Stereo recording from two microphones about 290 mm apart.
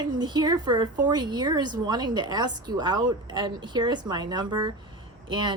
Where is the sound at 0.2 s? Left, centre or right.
Centre.